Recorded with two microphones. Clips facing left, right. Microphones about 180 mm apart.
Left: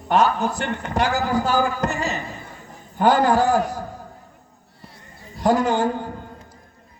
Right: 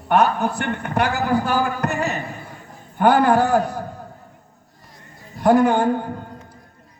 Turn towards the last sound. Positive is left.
turn(degrees=-55)  # may be behind; listen again after turning